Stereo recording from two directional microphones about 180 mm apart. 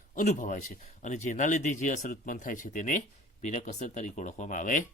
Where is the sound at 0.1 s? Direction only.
45° left (ahead or behind).